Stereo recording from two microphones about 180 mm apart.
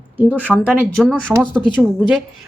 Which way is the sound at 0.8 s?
5° left (ahead or behind).